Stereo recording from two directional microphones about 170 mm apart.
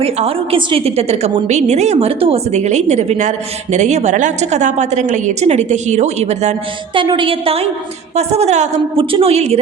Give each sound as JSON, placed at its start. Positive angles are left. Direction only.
{"t": 0.0, "sound": "a woman's voice", "side_deg": -35}
{"t": 6.9, "sound": "a woman's voice", "side_deg": -30}